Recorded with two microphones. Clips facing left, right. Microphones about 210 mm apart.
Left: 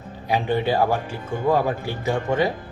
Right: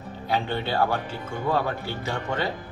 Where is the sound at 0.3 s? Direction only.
15° left (ahead or behind).